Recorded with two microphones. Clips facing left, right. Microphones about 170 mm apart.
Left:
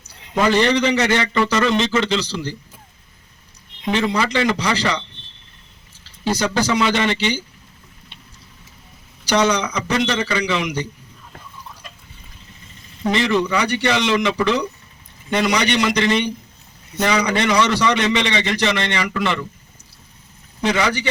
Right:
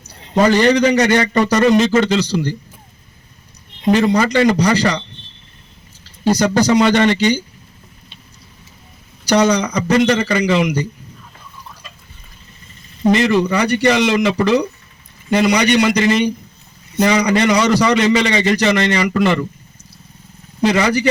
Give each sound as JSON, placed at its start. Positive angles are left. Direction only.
{"t": 0.1, "sound": "a man's voice", "side_deg": -40}
{"t": 3.8, "sound": "a man's voice", "side_deg": -40}
{"t": 6.2, "sound": "a man's voice", "side_deg": -40}
{"t": 9.2, "sound": "a man's voice", "side_deg": -40}
{"t": 13.0, "sound": "speech", "side_deg": -20}
{"t": 13.4, "sound": "a man's voice", "side_deg": -40}
{"t": 20.7, "sound": "a man's voice", "side_deg": -40}